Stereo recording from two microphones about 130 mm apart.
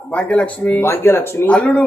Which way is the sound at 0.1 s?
10° left (ahead or behind).